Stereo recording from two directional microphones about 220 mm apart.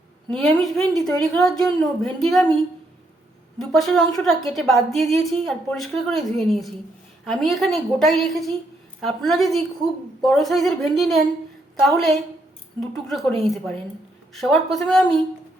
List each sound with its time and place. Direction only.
0.3 s a woman's voice: 5° left (ahead or behind)
3.6 s a woman's voice: centre (ahead or behind)